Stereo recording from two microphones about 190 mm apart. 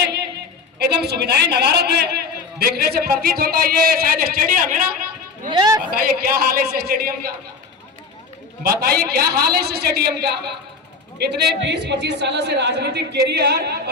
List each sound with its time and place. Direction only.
0.8 s a woman's voice: 60° right (ahead or behind)
5.5 s speech: 20° right (ahead or behind)
5.8 s a woman's voice: 50° right (ahead or behind)
8.6 s a woman's voice: 55° right (ahead or behind)